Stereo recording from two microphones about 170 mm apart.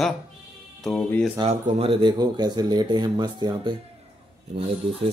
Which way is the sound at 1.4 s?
40° right (ahead or behind).